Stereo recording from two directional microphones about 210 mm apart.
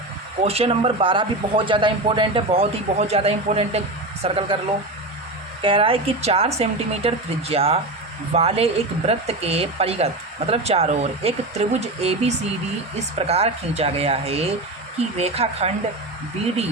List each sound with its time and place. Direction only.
0.4 s speech: 30° right (ahead or behind)
5.6 s speech: 25° right (ahead or behind)